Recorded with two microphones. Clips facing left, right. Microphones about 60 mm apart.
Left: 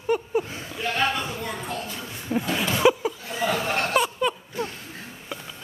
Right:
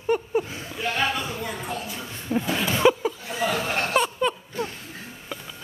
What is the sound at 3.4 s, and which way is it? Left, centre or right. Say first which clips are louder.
Chuckle: left 1 dB; centre.